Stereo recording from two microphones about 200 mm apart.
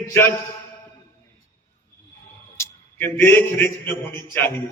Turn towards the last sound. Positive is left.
turn(degrees=10)  # may be behind; listen again after turning